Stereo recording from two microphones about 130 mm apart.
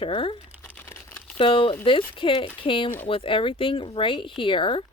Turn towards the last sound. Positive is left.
turn(degrees=40)  # may be behind; listen again after turning